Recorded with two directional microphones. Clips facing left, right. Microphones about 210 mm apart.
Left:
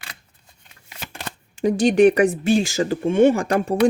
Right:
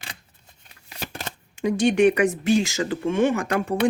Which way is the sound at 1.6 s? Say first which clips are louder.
Left 3 dB; 35° left (ahead or behind).